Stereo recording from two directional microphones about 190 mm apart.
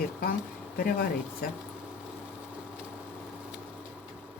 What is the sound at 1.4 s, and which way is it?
Speech, 50° left (ahead or behind).